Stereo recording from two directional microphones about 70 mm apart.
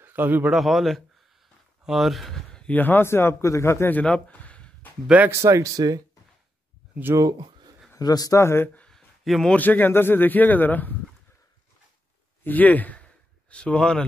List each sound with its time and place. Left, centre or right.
0.0 s a man's voice: right
0.5 s speech: centre
2.7 s a man's voice: left
3.9 s speech: centre
5.4 s speech: right
5.8 s speech: right
7.2 s speech: right
8.0 s speech: left
8.4 s a man's voice: left
8.7 s a sound: centre
9.2 s a man's voice: centre
9.5 s speech: left
12.4 s speech: left